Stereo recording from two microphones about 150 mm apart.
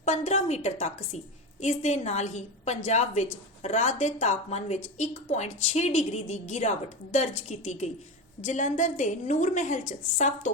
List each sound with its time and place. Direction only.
0.0 s a woman's voice: 50° left (ahead or behind)